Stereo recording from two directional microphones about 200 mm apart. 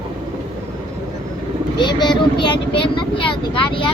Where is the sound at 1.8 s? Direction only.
20° left (ahead or behind).